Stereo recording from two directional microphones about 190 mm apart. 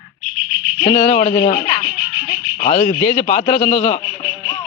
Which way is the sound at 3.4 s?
30° left (ahead or behind).